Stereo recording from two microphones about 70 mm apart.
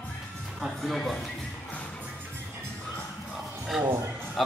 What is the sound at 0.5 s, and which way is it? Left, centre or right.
Speech, centre.